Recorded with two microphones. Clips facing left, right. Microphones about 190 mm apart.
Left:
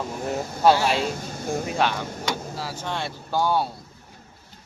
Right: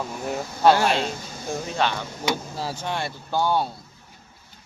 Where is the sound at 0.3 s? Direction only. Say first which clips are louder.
Right 1 dB; centre (ahead or behind).